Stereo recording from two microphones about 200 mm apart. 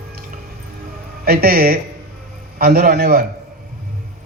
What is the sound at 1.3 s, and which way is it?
A man's voice, 50° right (ahead or behind).